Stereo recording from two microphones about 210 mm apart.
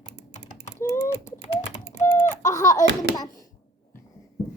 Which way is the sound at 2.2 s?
35° left (ahead or behind).